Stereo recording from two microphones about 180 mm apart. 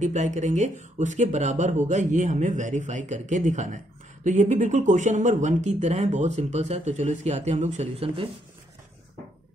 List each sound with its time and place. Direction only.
0.0 s speech: 40° right (ahead or behind)